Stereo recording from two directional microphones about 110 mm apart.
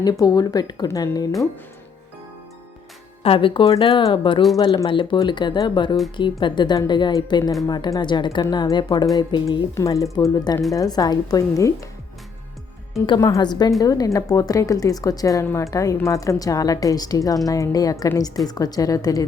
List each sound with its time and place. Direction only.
0.0 s a woman's voice: 35° left (ahead or behind)
3.2 s a woman's voice: 50° left (ahead or behind); by 11.9 s 30° left (ahead or behind)
13.1 s a woman's voice: 30° left (ahead or behind)